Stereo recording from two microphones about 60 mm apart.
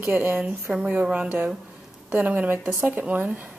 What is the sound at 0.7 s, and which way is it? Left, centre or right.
Speech, centre.